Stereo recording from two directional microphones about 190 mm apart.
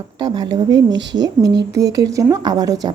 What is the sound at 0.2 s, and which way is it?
A woman's voice, 20° right (ahead or behind).